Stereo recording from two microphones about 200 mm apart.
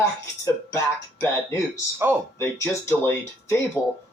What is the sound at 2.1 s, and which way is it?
Speech, 10° right (ahead or behind).